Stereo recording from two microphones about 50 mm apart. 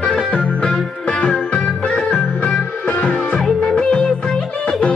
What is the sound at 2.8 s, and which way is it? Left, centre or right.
Music, left.